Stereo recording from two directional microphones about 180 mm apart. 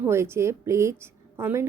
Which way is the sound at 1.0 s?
15° right (ahead or behind).